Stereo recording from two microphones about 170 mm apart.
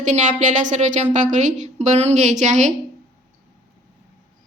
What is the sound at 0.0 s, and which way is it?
A woman's voice, 45° right (ahead or behind).